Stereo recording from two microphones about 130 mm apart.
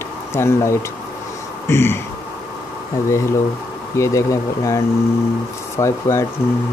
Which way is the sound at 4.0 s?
25° left (ahead or behind).